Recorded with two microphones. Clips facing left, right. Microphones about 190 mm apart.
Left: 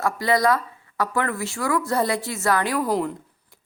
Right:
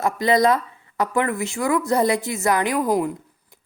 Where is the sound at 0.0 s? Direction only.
20° right (ahead or behind).